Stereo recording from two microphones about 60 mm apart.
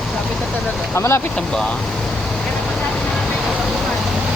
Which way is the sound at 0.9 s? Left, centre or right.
Left.